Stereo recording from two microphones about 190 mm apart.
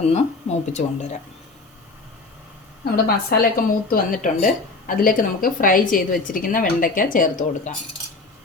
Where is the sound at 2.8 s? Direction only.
55° left (ahead or behind).